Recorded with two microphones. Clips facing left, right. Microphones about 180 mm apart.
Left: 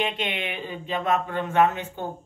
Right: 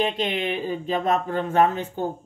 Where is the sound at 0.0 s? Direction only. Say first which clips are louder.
Right 4 dB; 35° right (ahead or behind).